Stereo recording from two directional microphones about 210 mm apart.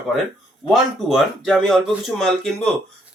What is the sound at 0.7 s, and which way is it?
Speech, centre (ahead or behind).